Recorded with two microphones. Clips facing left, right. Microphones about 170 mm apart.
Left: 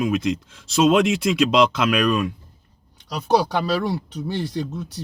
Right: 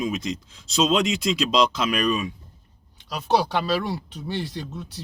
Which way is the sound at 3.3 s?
45° left (ahead or behind).